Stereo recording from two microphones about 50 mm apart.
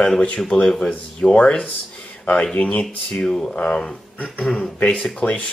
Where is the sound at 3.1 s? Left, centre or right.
Centre; by 5.5 s left.